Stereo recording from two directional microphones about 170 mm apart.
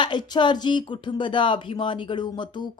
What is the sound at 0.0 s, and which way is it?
Speech, 25° left (ahead or behind).